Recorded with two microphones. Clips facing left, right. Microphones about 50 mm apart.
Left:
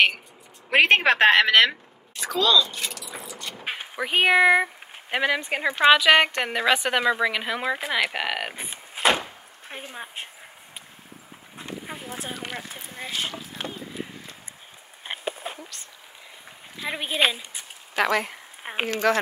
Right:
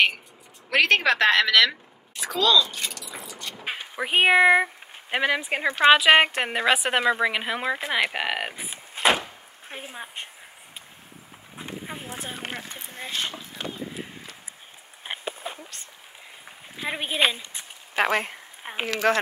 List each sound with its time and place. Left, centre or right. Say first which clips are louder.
0.7 s a woman's voice: left 2 dB; left
2.1 s speech: even; centre
3.1 s vehicle: left 1 dB; centre
4.0 s a woman's voice: right 1 dB; centre
5.9 s a woman's voice: even; centre
15.0 s a sound: left 1 dB; centre
16.9 s speech: even; centre
17.9 s speech: even; right
18.6 s speech: left 2 dB; centre
19.0 s speech: even; right